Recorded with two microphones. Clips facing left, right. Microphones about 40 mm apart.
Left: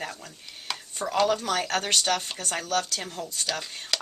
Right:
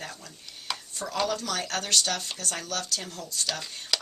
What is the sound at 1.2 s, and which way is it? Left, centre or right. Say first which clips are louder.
Speech: left 5 dB; left.